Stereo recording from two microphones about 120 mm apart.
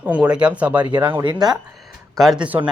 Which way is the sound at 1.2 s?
35° right (ahead or behind).